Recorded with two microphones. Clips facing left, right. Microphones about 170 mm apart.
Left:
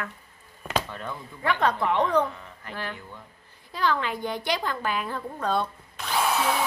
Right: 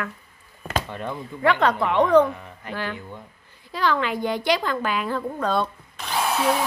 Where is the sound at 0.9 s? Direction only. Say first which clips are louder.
Right 5 dB; 20° right (ahead or behind).